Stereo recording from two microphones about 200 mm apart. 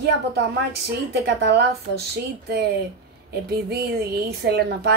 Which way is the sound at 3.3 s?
55° right (ahead or behind).